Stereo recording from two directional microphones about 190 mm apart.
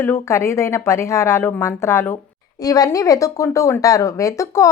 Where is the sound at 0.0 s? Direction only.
15° left (ahead or behind).